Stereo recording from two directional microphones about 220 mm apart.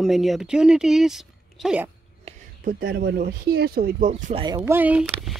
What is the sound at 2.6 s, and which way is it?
Speech, 45° right (ahead or behind).